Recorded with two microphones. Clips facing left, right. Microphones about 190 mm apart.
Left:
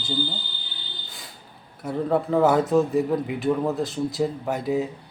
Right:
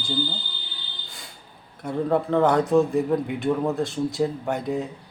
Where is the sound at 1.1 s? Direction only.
Centre (ahead or behind).